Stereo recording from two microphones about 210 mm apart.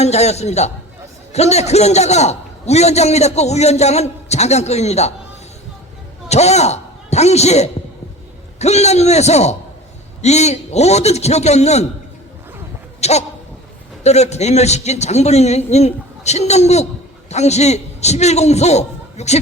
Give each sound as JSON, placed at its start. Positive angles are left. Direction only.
{"t": 0.0, "sound": "a man's voice", "side_deg": 30}
{"t": 6.2, "sound": "a man's voice", "side_deg": 30}
{"t": 13.0, "sound": "goat", "side_deg": 30}
{"t": 14.0, "sound": "a man's voice", "side_deg": 30}